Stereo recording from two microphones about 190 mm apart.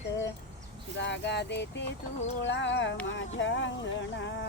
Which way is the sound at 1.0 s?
70° left (ahead or behind).